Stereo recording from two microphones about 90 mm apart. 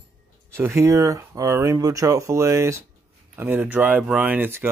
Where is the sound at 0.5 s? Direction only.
30° right (ahead or behind).